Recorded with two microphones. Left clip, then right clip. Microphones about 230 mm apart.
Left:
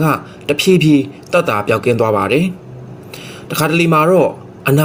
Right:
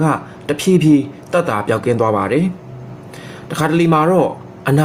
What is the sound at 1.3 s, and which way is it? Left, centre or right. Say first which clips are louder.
Speech: left 2 dB; centre.